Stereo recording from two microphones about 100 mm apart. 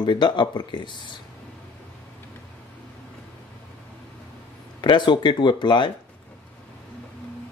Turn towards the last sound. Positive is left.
turn(degrees=50)  # may be behind; listen again after turning